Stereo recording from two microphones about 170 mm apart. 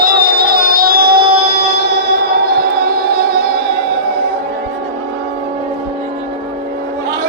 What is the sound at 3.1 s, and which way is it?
Music, 65° right (ahead or behind).